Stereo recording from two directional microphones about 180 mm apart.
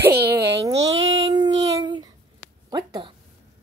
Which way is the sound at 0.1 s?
65° right (ahead or behind).